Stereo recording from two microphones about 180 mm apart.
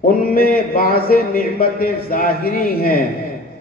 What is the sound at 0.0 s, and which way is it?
A man's voice, 55° left (ahead or behind).